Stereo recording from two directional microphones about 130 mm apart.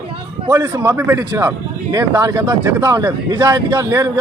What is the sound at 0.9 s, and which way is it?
Speech, 20° right (ahead or behind).